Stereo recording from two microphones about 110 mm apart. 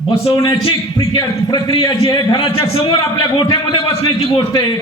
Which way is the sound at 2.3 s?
60° left (ahead or behind).